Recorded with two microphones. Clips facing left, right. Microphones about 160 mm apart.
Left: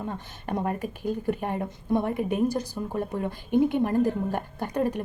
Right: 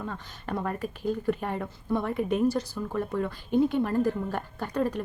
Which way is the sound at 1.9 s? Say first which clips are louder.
Left 1 dB; 15° left (ahead or behind).